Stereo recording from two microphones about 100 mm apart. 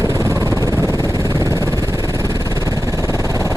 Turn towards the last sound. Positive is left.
turn(degrees=-35)  # may be behind; listen again after turning